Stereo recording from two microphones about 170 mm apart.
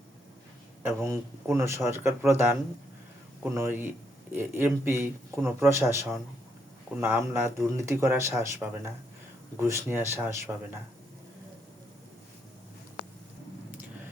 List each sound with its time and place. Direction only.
0.8 s speech: 15° right (ahead or behind)